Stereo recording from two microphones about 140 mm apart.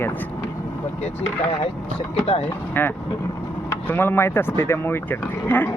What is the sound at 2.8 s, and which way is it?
Speech, 15° left (ahead or behind).